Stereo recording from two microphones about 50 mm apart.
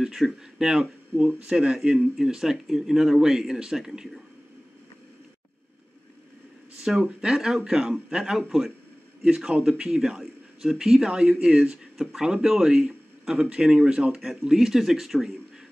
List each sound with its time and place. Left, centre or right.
0.0 s a man's voice: centre
7.0 s a man's voice: right
14.5 s a man's voice: centre